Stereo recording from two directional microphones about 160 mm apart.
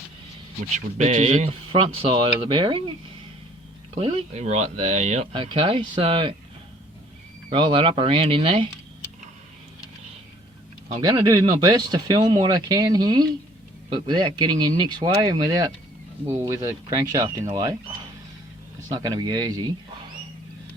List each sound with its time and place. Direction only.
0.9 s speech: 50° right (ahead or behind); by 2.8 s 30° right (ahead or behind)
3.9 s speech: 40° right (ahead or behind)
5.3 s speech: 30° right (ahead or behind)
7.5 s speech: 30° right (ahead or behind)
11.0 s speech: 25° right (ahead or behind)
18.9 s speech: 25° right (ahead or behind)